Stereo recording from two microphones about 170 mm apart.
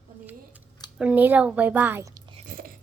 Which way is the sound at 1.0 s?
10° right (ahead or behind).